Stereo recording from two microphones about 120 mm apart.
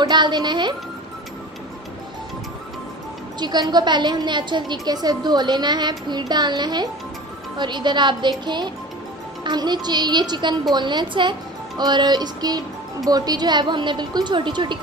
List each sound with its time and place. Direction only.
0.0 s a woman's voice: 40° right (ahead or behind)
3.3 s a woman's voice: 35° right (ahead or behind)